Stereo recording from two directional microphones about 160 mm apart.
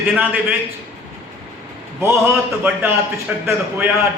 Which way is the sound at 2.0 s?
15° right (ahead or behind).